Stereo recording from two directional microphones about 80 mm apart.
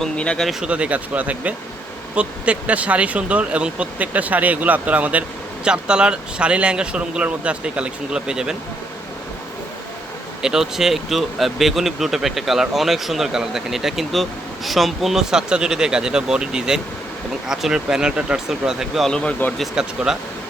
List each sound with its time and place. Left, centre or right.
0.0 s speech: centre
0.6 s speech: centre
10.4 s speech: centre
19.0 s speech: centre
19.8 s speech: centre